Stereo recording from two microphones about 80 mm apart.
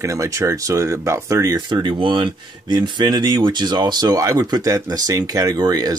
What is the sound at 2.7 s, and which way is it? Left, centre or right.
Speech, right.